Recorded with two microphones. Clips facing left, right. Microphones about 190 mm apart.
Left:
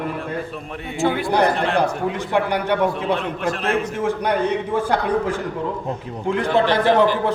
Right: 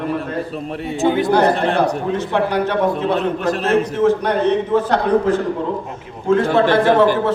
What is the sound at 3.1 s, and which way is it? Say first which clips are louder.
Speech: right 5 dB; 40° right (ahead or behind).